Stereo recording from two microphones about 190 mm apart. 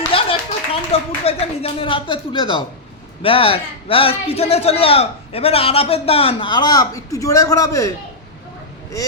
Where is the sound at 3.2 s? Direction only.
30° left (ahead or behind).